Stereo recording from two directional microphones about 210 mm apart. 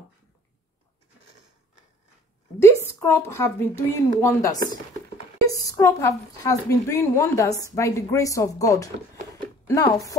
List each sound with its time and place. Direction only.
3.0 s speech: 10° left (ahead or behind)